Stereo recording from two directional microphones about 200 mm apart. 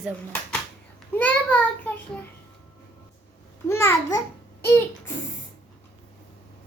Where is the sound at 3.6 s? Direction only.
10° left (ahead or behind).